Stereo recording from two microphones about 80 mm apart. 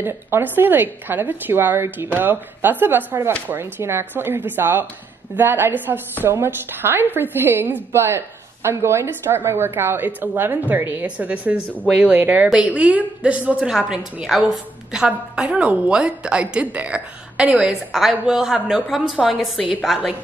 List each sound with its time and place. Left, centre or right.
0.0 s a woman's voice: right; by 20.2 s centre